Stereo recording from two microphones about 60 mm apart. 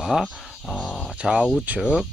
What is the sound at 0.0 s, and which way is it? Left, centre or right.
Speech, centre.